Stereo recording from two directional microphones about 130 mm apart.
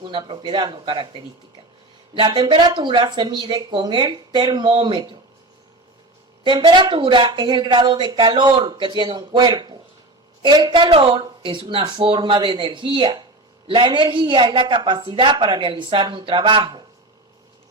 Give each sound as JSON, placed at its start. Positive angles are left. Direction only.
{"t": 0.0, "sound": "speech", "side_deg": -35}
{"t": 6.4, "sound": "speech", "side_deg": -35}